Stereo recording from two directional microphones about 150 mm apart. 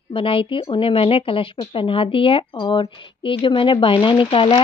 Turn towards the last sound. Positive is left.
turn(degrees=35)  # may be behind; listen again after turning